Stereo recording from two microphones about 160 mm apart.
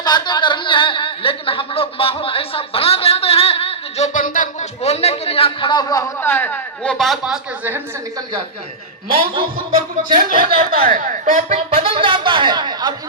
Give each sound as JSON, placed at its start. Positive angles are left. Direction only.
{"t": 0.0, "sound": "a sound", "side_deg": 25}
{"t": 6.1, "sound": "a man's voice", "side_deg": 10}
{"t": 7.0, "sound": "speech", "side_deg": 0}
{"t": 10.2, "sound": "speech", "side_deg": -65}